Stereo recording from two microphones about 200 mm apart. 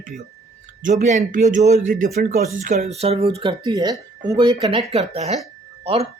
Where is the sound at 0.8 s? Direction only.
35° right (ahead or behind).